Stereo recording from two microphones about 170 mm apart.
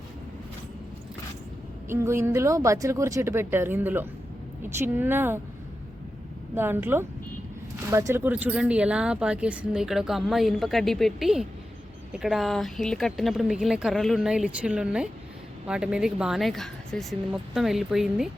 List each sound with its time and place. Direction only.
1.9 s speech: 15° right (ahead or behind)
6.5 s speech: 15° right (ahead or behind)